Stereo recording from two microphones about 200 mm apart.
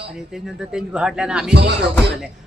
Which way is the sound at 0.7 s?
5° right (ahead or behind).